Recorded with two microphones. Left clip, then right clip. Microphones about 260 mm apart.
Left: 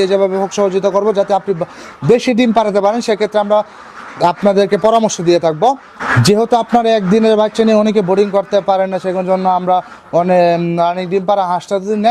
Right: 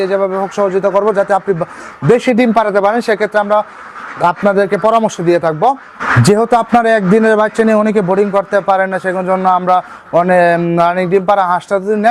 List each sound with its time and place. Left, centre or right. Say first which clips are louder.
0.0 s a man's voice: left 1 dB; right